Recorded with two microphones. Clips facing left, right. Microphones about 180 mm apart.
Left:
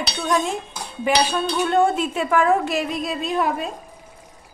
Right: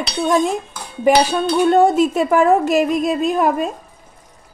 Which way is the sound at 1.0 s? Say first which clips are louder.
Right 6 dB; 45° right (ahead or behind).